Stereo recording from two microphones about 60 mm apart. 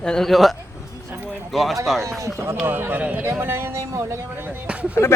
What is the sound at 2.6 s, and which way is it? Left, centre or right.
Speech, right.